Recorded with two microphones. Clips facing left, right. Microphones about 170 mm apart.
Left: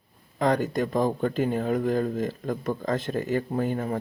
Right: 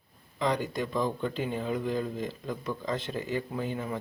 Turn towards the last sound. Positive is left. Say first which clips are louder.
# left 6 dB
turn(degrees=45)  # may be behind; listen again after turning